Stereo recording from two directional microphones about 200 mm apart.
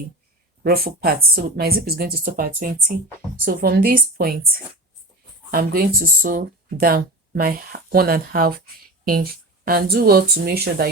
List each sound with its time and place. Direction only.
0.6 s speech: 50° right (ahead or behind)
5.5 s speech: 50° right (ahead or behind)
9.6 s speech: 50° right (ahead or behind)